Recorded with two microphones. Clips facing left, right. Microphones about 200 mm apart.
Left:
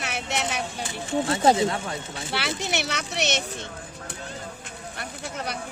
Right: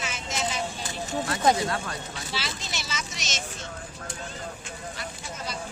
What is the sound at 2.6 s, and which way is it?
Speech, 65° left (ahead or behind).